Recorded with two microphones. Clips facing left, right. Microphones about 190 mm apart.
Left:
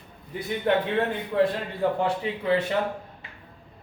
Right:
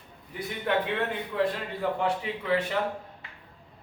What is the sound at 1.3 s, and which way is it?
Speech, 40° left (ahead or behind).